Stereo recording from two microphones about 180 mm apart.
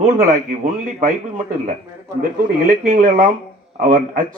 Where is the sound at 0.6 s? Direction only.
40° right (ahead or behind).